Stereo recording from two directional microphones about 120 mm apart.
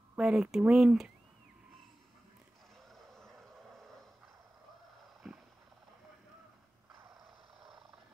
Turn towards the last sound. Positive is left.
turn(degrees=-30)  # may be behind; listen again after turning